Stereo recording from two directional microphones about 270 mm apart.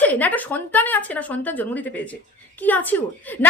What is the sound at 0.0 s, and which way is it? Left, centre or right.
A woman's voice, centre.